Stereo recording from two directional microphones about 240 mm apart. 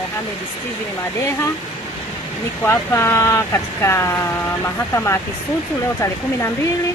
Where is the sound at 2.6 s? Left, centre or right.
Centre.